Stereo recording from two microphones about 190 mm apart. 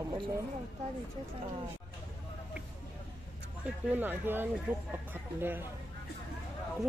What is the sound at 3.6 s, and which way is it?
Speech, 10° right (ahead or behind).